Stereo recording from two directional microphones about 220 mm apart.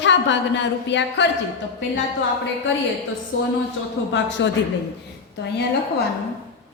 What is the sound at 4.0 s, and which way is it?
Speech, 60° left (ahead or behind).